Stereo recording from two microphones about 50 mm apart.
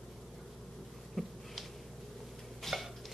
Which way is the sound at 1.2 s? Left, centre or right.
Centre.